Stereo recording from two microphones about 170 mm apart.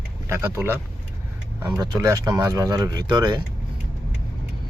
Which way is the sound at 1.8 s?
25° right (ahead or behind).